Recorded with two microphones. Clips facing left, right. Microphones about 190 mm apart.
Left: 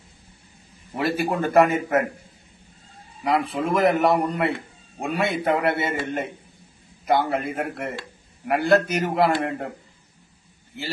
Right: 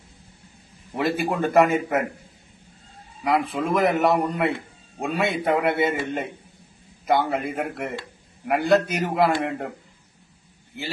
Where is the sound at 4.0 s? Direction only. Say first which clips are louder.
Even; centre (ahead or behind).